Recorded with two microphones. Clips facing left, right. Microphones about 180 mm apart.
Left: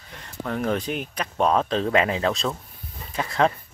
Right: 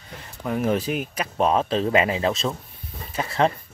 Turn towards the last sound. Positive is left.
turn(degrees=0)  # may be behind; listen again after turning